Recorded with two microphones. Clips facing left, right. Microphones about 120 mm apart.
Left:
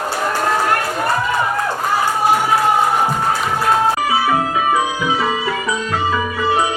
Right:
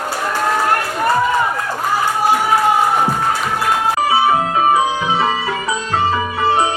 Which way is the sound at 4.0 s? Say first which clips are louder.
Right 2 dB; 30° right (ahead or behind).